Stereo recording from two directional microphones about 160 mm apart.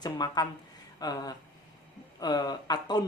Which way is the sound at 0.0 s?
25° left (ahead or behind).